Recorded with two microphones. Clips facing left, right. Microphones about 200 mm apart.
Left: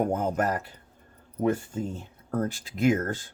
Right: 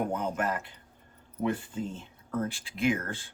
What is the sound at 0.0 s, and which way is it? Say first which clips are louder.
Speech: left 4 dB; 45° left (ahead or behind).